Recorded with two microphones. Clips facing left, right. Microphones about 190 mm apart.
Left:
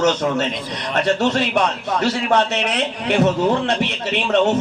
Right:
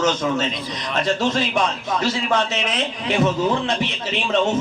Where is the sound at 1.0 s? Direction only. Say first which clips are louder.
Left 3 dB; 65° left (ahead or behind).